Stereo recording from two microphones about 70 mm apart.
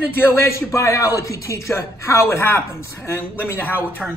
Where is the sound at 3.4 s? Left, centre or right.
Left.